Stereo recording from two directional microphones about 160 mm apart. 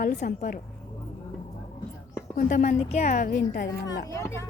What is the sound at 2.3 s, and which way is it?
Speech, 50° left (ahead or behind).